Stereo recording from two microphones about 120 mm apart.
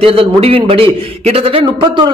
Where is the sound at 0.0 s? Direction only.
50° right (ahead or behind).